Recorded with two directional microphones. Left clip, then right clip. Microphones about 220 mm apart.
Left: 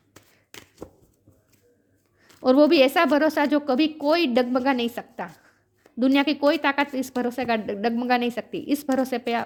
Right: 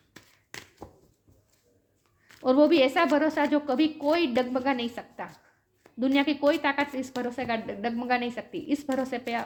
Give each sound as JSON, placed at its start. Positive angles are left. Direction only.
{"t": 0.1, "sound": "chopping", "side_deg": 10}
{"t": 2.4, "sound": "a woman's voice", "side_deg": 45}